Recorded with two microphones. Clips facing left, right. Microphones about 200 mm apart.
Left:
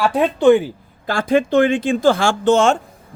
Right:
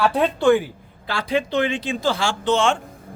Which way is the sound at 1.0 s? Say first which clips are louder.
Left 6 dB; 50° left (ahead or behind).